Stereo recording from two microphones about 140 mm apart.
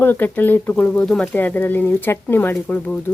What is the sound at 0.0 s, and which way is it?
Speech, 15° left (ahead or behind).